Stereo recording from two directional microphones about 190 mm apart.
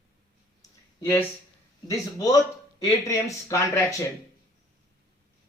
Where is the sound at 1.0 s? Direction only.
15° left (ahead or behind).